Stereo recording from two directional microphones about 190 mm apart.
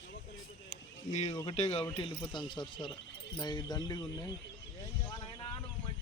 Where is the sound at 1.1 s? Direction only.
35° left (ahead or behind).